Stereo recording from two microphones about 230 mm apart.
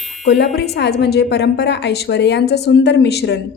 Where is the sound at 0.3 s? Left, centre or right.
Left.